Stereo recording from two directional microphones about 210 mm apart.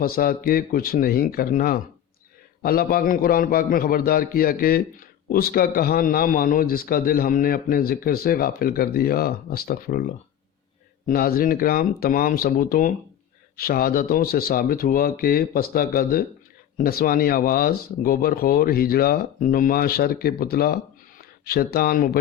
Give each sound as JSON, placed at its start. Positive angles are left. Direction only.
{"t": 0.0, "sound": "a man's voice", "side_deg": 45}